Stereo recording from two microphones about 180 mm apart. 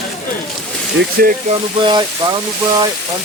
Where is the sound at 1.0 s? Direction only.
55° right (ahead or behind).